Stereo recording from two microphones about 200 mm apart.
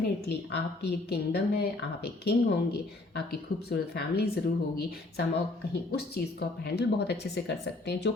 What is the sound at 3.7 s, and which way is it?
A woman's voice, 55° left (ahead or behind).